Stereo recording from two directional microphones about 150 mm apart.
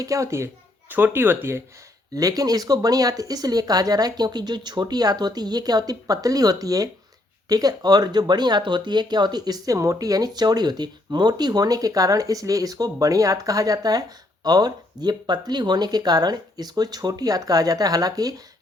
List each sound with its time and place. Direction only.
0.0 s speech: 20° right (ahead or behind)